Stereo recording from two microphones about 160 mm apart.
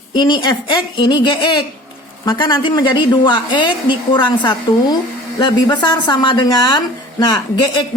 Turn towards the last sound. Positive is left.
turn(degrees=30)  # may be behind; listen again after turning